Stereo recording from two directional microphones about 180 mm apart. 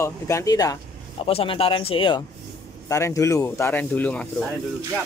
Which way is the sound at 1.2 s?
30° left (ahead or behind).